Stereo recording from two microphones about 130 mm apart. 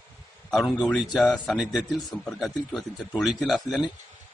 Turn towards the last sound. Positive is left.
turn(degrees=0)  # may be behind; listen again after turning